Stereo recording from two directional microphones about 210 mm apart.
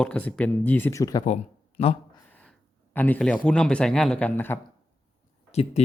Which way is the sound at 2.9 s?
10° left (ahead or behind).